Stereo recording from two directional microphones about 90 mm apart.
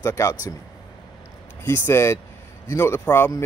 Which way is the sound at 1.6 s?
30° left (ahead or behind).